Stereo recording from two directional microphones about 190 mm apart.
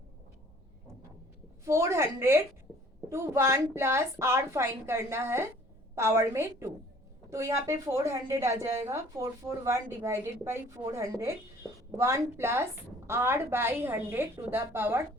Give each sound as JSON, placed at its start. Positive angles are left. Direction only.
{"t": 1.6, "sound": "speech", "side_deg": -15}